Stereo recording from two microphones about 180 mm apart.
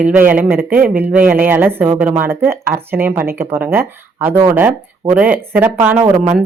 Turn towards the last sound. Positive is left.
turn(degrees=-20)  # may be behind; listen again after turning